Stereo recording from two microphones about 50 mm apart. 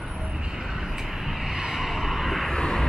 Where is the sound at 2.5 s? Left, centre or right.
Centre.